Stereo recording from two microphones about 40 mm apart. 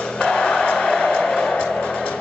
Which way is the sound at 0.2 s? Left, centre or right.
Left.